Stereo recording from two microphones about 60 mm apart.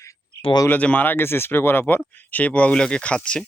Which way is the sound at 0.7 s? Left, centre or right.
Left.